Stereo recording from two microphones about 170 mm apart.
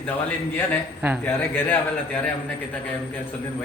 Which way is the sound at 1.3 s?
10° left (ahead or behind).